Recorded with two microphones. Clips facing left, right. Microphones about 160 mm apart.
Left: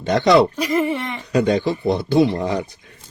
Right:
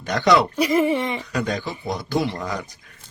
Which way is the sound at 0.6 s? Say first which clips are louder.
Right 1 dB; 15° right (ahead or behind).